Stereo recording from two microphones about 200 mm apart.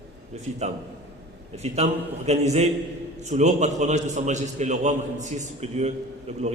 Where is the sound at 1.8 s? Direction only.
35° right (ahead or behind).